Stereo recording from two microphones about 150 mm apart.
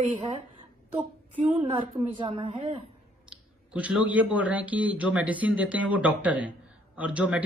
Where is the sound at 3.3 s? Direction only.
5° right (ahead or behind).